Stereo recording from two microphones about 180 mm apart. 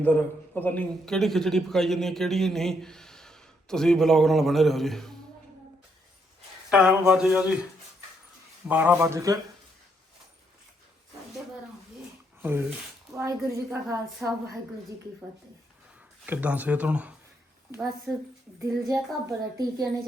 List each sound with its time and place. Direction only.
0.5 s a man's voice: 10° left (ahead or behind)
6.7 s a man's voice: 5° right (ahead or behind)
8.6 s speech: 10° right (ahead or behind)
12.4 s speech: 10° right (ahead or behind)
13.7 s a man's voice: centre (ahead or behind)
16.2 s speech: 10° right (ahead or behind)
18.6 s speech: 15° right (ahead or behind)